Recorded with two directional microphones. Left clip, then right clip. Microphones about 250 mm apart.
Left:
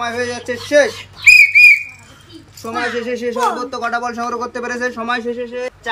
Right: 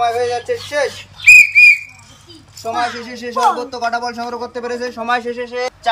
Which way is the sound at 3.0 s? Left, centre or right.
Centre.